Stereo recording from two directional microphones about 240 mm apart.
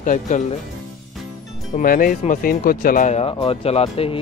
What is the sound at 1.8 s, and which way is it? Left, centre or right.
Speech, left.